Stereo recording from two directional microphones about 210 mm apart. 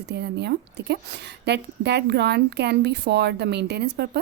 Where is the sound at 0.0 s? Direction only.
55° right (ahead or behind).